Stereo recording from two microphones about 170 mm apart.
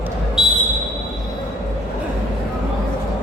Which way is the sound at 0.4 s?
Centre (ahead or behind).